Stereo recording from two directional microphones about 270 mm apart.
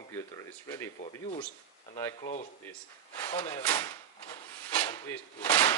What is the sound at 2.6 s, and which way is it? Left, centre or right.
Drawer open or close, centre.